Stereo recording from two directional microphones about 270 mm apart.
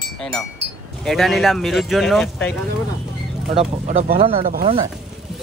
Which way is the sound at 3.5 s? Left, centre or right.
Right.